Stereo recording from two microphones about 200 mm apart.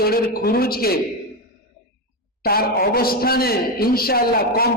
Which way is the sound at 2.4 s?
50° left (ahead or behind).